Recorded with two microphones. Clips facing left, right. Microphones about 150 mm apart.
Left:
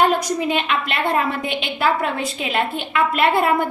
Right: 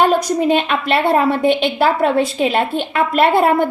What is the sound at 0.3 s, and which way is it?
A woman's voice, 40° right (ahead or behind).